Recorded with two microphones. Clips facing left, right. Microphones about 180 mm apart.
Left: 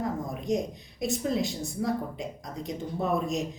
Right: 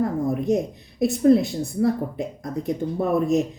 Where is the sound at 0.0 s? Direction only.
60° right (ahead or behind).